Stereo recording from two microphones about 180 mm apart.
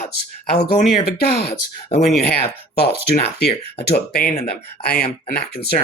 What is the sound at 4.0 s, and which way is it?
Speech, 60° left (ahead or behind).